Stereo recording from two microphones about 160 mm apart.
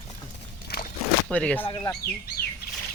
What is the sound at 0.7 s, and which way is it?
Walk, 90° left.